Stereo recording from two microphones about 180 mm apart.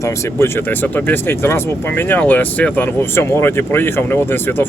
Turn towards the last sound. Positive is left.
turn(degrees=10)  # may be behind; listen again after turning